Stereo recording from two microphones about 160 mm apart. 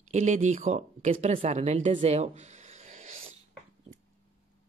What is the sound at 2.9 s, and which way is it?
Cat, 50° right (ahead or behind).